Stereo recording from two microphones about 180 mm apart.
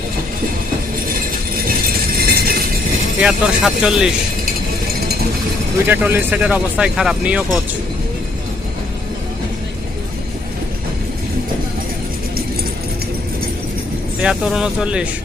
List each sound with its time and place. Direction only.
2.1 s a sound: 60° right (ahead or behind)
3.2 s speech: 5° right (ahead or behind)
5.9 s speech: 10° right (ahead or behind)
14.2 s speech: 5° right (ahead or behind)